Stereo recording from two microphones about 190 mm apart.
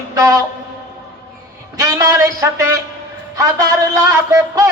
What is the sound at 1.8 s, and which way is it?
A man's voice, 15° right (ahead or behind).